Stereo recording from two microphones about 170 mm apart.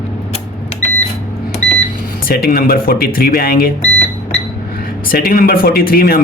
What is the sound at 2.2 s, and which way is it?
Speech, 60° left (ahead or behind).